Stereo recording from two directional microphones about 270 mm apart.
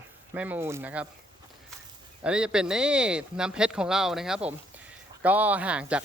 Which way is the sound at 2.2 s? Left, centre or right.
Centre.